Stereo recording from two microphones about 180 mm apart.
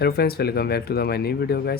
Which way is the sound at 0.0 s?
60° left (ahead or behind).